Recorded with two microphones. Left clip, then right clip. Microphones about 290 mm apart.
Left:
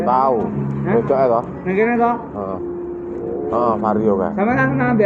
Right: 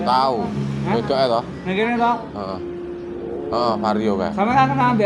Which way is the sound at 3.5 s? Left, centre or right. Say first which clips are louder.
Left 2 dB; right.